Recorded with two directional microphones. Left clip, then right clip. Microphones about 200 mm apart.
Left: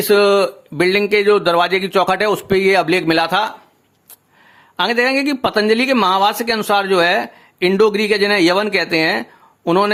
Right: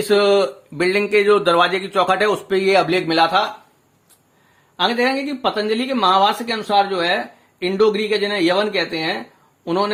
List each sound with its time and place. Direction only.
0.0 s speech: 30° left (ahead or behind)
4.8 s speech: 35° left (ahead or behind)